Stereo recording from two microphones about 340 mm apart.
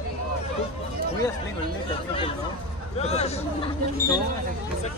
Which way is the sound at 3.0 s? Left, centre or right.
Centre.